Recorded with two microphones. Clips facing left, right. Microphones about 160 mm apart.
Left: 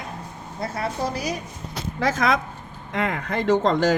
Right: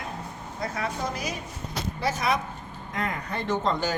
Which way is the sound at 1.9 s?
90° left.